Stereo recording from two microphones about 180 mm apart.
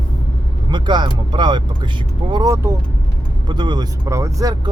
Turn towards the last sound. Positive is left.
turn(degrees=-20)  # may be behind; listen again after turning